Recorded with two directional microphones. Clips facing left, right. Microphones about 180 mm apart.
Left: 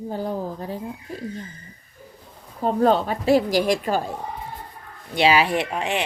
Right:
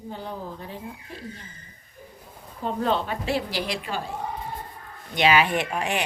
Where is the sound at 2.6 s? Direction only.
40° left (ahead or behind).